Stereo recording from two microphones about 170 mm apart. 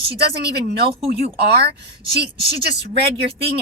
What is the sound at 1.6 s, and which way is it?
Speech, 70° right (ahead or behind).